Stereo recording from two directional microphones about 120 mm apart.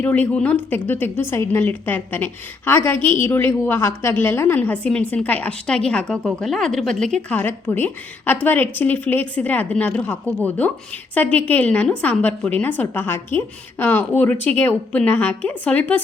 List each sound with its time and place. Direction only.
0.0 s a woman's voice: 15° left (ahead or behind)